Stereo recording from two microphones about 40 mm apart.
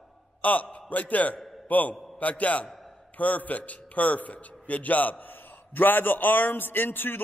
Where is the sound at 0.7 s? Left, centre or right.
Left.